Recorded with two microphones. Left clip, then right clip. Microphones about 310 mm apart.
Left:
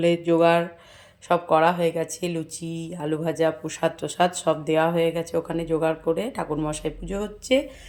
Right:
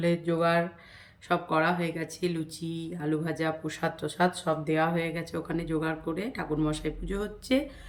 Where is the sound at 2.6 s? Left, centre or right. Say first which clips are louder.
Left 3 dB; centre.